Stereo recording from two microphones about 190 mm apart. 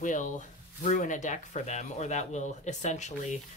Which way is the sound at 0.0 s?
40° left (ahead or behind).